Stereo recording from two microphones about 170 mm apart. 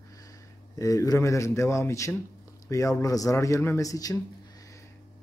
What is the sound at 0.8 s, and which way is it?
Speech, 20° left (ahead or behind).